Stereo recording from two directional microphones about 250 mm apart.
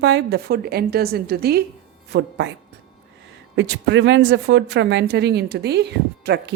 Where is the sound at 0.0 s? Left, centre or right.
Right.